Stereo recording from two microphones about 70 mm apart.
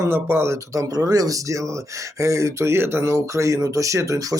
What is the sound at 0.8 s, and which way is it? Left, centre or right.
Speech, right.